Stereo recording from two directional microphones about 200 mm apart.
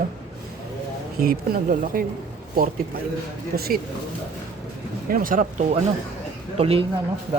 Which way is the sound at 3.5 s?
50° right (ahead or behind).